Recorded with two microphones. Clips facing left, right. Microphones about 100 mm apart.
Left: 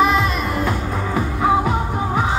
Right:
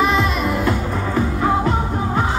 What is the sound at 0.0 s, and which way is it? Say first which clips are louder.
Music: left 1 dB; centre (ahead or behind).